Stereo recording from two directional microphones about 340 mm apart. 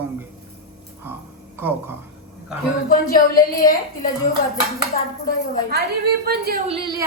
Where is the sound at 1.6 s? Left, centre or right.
Centre.